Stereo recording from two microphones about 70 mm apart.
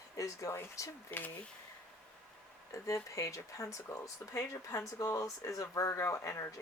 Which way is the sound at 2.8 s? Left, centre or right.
Left.